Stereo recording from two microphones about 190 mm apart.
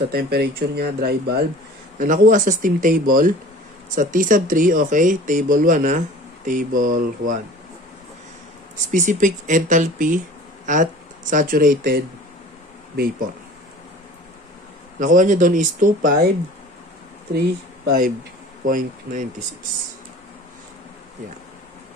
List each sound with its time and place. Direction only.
0.1 s speech: 55° right (ahead or behind)
2.0 s speech: 45° right (ahead or behind)
8.9 s speech: 40° right (ahead or behind)
15.0 s speech: 40° right (ahead or behind)
17.8 s speech: 50° right (ahead or behind)